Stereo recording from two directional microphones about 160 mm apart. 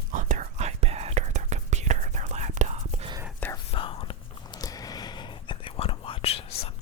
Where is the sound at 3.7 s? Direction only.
35° left (ahead or behind).